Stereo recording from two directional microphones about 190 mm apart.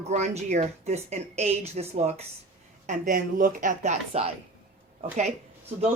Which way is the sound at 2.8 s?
45° right (ahead or behind).